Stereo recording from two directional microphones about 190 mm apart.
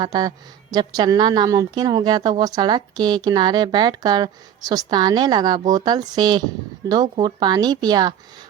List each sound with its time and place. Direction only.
0.0 s a woman's voice: 20° right (ahead or behind)